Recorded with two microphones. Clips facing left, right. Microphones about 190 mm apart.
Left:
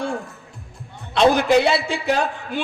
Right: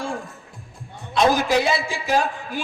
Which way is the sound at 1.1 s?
65° left (ahead or behind).